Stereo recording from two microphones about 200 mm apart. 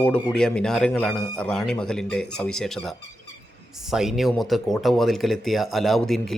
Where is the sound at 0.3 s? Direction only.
5° left (ahead or behind).